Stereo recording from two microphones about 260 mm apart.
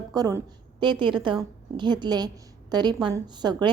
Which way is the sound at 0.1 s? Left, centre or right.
Centre.